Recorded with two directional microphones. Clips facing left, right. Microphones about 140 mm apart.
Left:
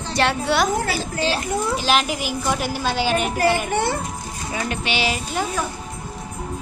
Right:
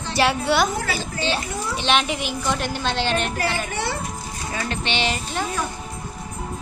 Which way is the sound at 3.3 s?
50° left (ahead or behind).